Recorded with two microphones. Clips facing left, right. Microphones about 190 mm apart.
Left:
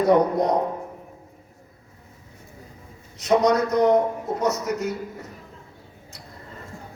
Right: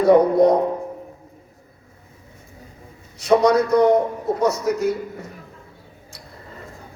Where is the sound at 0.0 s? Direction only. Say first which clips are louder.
Right 5 dB; 30° right (ahead or behind).